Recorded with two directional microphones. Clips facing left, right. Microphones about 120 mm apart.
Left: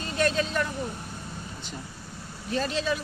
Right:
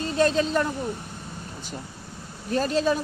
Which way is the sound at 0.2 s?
30° right (ahead or behind).